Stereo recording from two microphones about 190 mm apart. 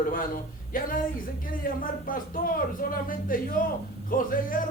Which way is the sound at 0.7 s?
45° left (ahead or behind).